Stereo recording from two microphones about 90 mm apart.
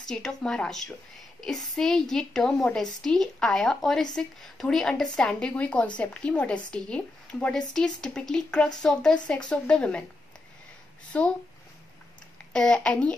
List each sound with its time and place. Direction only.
0.0 s a woman's voice: 5° left (ahead or behind)
11.1 s a woman's voice: 15° left (ahead or behind)
12.5 s a woman's voice: 10° left (ahead or behind)